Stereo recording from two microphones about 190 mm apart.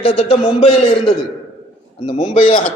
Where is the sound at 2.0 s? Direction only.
35° left (ahead or behind).